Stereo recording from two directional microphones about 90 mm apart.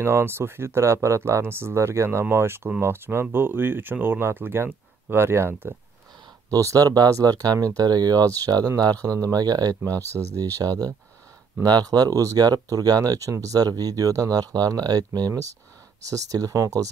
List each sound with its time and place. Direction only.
0.0 s speech: 30° right (ahead or behind)
6.5 s speech: 40° right (ahead or behind)